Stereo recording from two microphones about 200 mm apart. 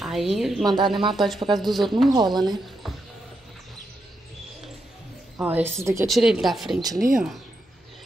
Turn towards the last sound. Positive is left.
turn(degrees=-20)  # may be behind; listen again after turning